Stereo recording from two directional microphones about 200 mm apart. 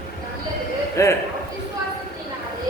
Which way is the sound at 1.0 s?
15° left (ahead or behind).